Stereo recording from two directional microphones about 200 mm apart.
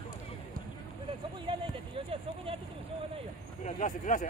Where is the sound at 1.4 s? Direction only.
25° right (ahead or behind).